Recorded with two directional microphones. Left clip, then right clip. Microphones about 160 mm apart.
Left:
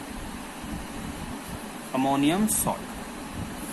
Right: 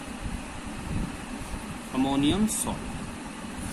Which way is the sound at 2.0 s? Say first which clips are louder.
Left 3 dB; 20° left (ahead or behind).